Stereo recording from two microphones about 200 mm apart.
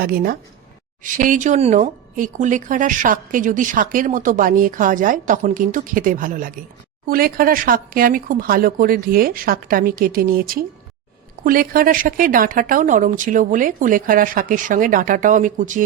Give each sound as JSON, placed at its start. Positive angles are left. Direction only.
{"t": 0.0, "sound": "speech", "side_deg": -50}